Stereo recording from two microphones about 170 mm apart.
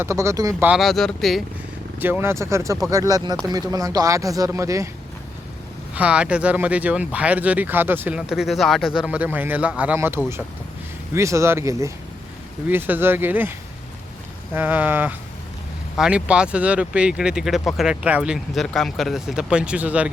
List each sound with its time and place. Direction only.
0.0 s speech: 15° right (ahead or behind)
0.7 s speech: centre (ahead or behind)
2.0 s speech: 10° right (ahead or behind)
5.9 s speech: 5° right (ahead or behind)
14.5 s speech: 10° right (ahead or behind)